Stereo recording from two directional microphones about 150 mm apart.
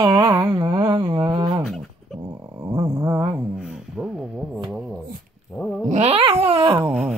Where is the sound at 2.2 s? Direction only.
25° right (ahead or behind).